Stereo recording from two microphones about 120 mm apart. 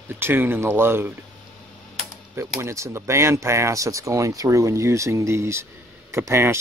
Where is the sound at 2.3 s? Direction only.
25° right (ahead or behind).